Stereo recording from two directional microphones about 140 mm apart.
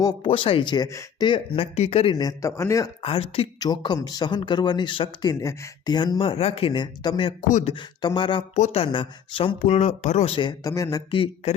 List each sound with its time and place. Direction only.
0.0 s speech: 30° left (ahead or behind)
0.3 s speech: 40° left (ahead or behind)
1.3 s speech: 45° left (ahead or behind)
2.1 s speech: 25° left (ahead or behind)
3.0 s speech: 40° left (ahead or behind)
3.6 s speech: 30° left (ahead or behind)
8.5 s speech: 50° left (ahead or behind)
9.6 s speech: 55° left (ahead or behind)
10.6 s speech: 25° left (ahead or behind)
11.1 s speech: 40° left (ahead or behind)